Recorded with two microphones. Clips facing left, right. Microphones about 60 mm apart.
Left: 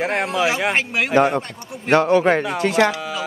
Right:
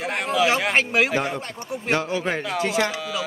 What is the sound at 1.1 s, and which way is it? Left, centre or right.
Speech, left.